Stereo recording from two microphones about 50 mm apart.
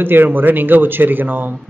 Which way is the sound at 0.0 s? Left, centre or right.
Right.